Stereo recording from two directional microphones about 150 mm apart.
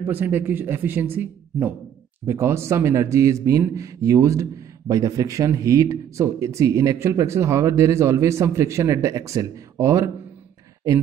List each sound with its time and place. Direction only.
0.0 s a man's voice: 15° right (ahead or behind)